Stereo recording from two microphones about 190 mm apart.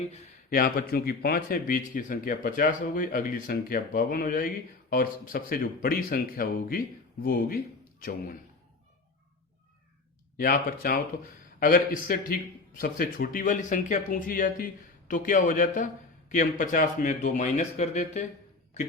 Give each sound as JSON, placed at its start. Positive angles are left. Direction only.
{"t": 0.5, "sound": "a man's voice", "side_deg": 50}
{"t": 10.3, "sound": "a man's voice", "side_deg": 50}